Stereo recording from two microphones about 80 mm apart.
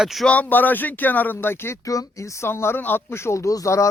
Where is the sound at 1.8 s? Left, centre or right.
Left.